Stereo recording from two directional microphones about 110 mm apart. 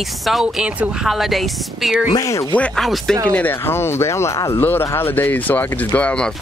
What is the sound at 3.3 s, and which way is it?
Speech, 20° left (ahead or behind).